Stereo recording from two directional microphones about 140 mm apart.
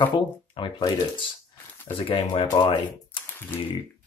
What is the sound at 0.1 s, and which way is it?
Speech, 35° left (ahead or behind).